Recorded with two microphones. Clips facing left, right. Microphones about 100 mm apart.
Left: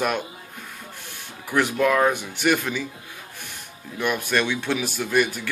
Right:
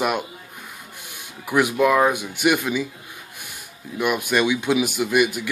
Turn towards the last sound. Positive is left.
turn(degrees=-10)  # may be behind; listen again after turning